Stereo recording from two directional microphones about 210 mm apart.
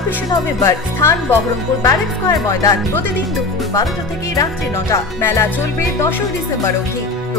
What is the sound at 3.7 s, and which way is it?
Speech, 15° left (ahead or behind).